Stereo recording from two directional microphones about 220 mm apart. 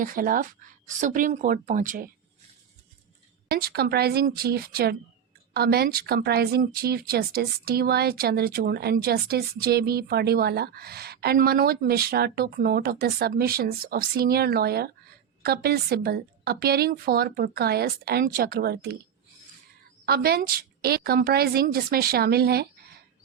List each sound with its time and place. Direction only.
0.0 s speech: 40° right (ahead or behind)
3.5 s a woman's voice: 45° right (ahead or behind)
20.1 s a woman's voice: 45° right (ahead or behind)